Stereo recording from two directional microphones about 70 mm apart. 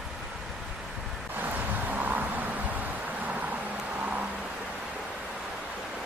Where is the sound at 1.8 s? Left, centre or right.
Right.